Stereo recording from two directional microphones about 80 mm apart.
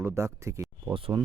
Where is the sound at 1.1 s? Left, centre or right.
Right.